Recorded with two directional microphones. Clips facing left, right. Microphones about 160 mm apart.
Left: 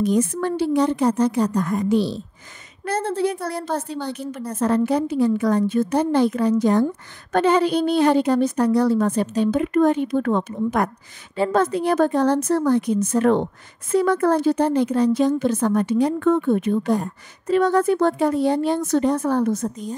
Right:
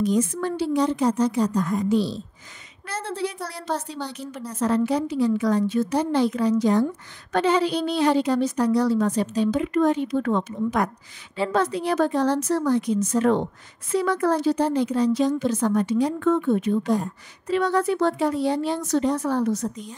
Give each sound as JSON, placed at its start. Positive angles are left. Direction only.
{"t": 0.0, "sound": "a woman's voice", "side_deg": 60}
{"t": 2.8, "sound": "a woman's voice", "side_deg": 50}